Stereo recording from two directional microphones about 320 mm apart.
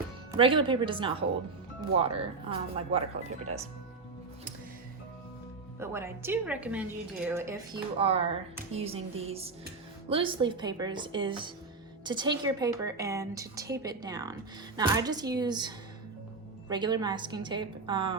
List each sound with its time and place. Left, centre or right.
0.3 s a woman's voice: centre
5.8 s a woman's voice: centre